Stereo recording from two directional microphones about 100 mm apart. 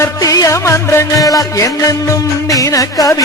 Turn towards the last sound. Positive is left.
turn(degrees=35)  # may be behind; listen again after turning